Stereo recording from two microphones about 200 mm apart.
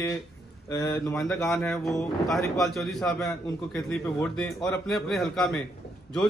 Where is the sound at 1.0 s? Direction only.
Centre (ahead or behind).